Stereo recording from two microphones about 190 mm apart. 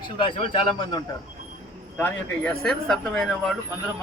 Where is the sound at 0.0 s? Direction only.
25° left (ahead or behind).